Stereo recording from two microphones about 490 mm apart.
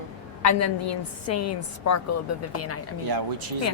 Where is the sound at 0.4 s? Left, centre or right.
Left.